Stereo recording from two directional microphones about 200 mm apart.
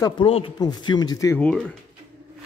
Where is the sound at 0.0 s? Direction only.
25° left (ahead or behind).